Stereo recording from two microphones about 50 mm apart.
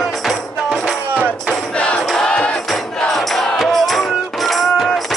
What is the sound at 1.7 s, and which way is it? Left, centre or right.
Music, left.